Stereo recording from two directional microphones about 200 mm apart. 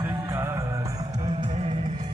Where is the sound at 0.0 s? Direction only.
15° right (ahead or behind).